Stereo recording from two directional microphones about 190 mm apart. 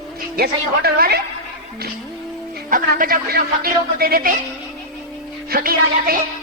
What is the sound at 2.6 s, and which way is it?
Speech, 45° right (ahead or behind).